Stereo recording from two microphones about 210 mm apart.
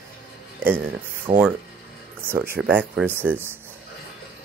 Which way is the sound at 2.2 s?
10° right (ahead or behind).